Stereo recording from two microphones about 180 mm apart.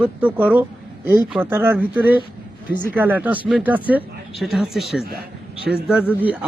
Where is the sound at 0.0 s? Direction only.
10° right (ahead or behind).